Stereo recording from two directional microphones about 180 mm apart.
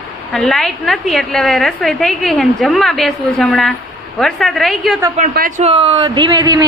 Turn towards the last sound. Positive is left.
turn(degrees=-20)  # may be behind; listen again after turning